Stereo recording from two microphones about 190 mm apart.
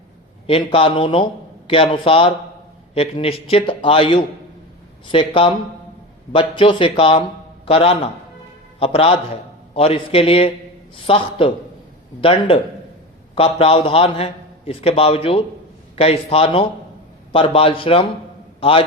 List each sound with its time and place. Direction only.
0.4 s a man's voice: 30° left (ahead or behind)